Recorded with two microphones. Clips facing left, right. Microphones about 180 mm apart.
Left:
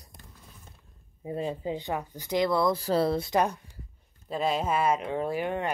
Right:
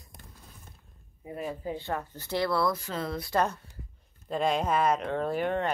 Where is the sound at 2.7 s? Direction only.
35° left (ahead or behind).